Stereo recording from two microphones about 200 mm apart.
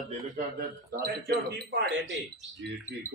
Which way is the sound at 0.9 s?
50° right (ahead or behind).